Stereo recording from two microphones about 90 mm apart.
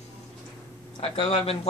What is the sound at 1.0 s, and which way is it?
Speech, 90° left.